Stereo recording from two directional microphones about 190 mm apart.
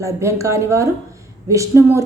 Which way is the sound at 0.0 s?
15° right (ahead or behind).